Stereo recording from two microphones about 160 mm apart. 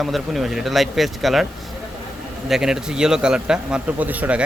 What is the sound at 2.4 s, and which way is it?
A man's voice, 5° right (ahead or behind).